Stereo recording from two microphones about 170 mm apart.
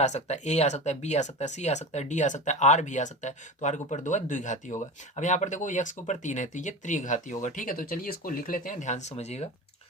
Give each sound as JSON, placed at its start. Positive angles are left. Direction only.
{"t": 0.0, "sound": "speech", "side_deg": 40}